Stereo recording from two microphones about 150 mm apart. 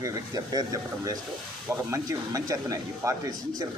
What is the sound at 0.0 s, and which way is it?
A man's voice, 25° right (ahead or behind).